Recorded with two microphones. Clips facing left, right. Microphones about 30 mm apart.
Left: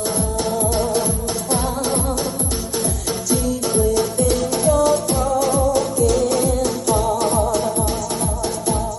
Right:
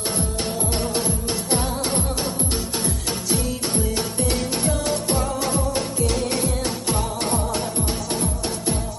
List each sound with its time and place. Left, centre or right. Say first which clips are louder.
0.6 s music: left 5 dB; centre
2.8 s music: left 3 dB; right